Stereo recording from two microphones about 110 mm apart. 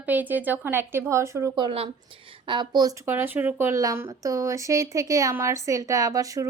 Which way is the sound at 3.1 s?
20° right (ahead or behind).